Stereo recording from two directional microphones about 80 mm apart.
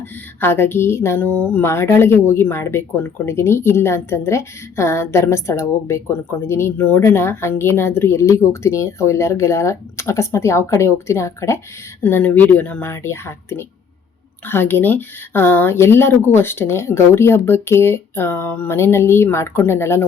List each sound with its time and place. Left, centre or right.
0.3 s speech: left
1.6 s speech: left
12.0 s speech: left